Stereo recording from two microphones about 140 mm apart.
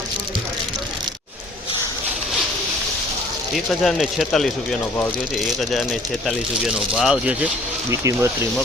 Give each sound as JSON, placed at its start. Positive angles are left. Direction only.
{"t": 3.7, "sound": "speech", "side_deg": 0}
{"t": 7.9, "sound": "speech", "side_deg": -20}